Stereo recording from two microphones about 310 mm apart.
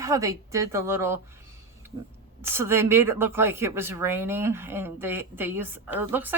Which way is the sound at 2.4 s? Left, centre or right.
Centre.